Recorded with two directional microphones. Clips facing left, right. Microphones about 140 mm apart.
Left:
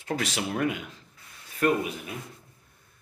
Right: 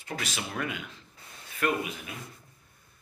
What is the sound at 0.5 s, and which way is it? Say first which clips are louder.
Speech: left 7 dB; 45° left (ahead or behind).